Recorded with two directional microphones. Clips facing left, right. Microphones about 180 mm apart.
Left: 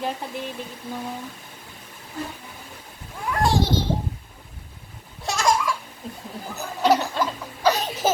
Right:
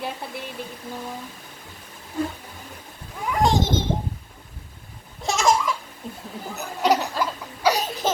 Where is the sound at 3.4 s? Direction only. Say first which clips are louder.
Right 1 dB; 20° right (ahead or behind).